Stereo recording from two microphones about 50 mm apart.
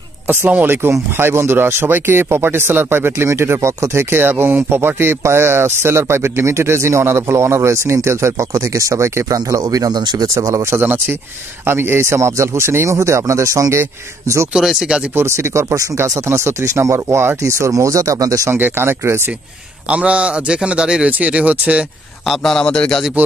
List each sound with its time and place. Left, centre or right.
0.3 s speech: right
1.1 s speech: right
3.6 s speech: right
10.3 s speech: right
10.8 s speech: right
11.6 s speech: right
14.5 s speech: centre
15.1 s speech: right
16.0 s speech: right
17.4 s speech: right
18.6 s speech: right
19.9 s a man's voice: right
22.2 s a man's voice: centre
22.5 s speech: centre